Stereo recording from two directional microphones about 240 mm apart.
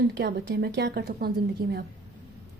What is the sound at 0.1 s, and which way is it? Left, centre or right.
A woman's voice, right.